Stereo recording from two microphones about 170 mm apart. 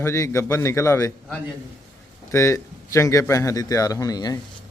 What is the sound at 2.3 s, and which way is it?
A man's voice, 15° left (ahead or behind).